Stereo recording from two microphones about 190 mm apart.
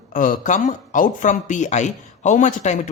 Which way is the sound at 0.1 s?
45° left (ahead or behind).